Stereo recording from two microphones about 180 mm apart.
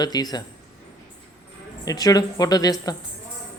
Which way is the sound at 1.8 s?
20° left (ahead or behind).